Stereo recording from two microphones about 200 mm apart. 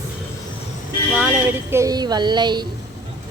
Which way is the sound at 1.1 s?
10° right (ahead or behind).